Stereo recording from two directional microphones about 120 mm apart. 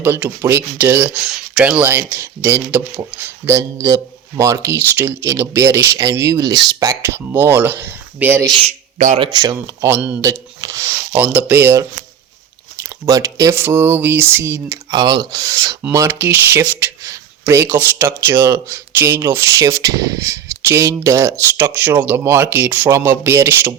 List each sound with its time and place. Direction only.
0.0 s speech: 15° right (ahead or behind)
8.6 s speech: 75° right (ahead or behind)
9.1 s speech: 40° right (ahead or behind)
10.2 s speech: 25° right (ahead or behind)
15.8 s speech: 20° right (ahead or behind)